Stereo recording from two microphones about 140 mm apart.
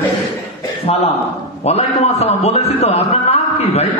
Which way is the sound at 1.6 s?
50° left (ahead or behind).